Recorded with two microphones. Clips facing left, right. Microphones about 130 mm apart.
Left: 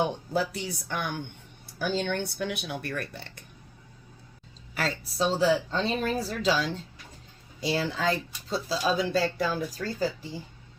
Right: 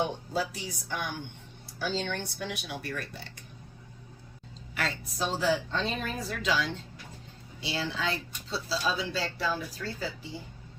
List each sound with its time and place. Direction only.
0.3 s speech: 60° left (ahead or behind)
4.7 s speech: 35° left (ahead or behind)